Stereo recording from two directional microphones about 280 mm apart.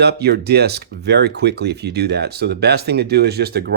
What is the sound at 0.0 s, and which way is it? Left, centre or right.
Speech, right.